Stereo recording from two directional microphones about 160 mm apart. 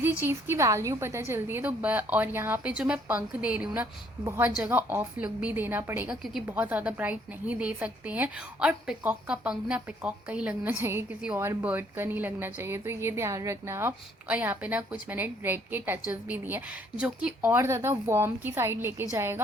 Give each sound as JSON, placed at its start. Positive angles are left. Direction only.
{"t": 0.0, "sound": "a woman's voice", "side_deg": -15}